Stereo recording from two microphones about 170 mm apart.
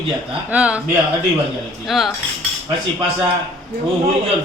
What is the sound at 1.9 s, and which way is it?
Speech, centre (ahead or behind).